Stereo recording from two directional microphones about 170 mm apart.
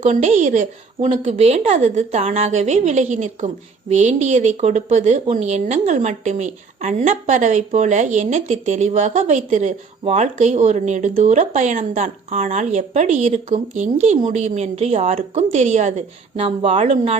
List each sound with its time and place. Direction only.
0.0 s speech: 45° right (ahead or behind)